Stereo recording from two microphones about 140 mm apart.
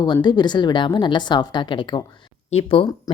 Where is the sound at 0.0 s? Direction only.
30° left (ahead or behind).